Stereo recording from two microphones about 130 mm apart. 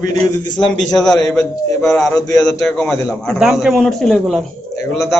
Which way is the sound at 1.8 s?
25° left (ahead or behind).